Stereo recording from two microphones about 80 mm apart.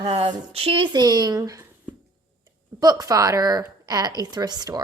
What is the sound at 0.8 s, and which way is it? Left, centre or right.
Speech, right.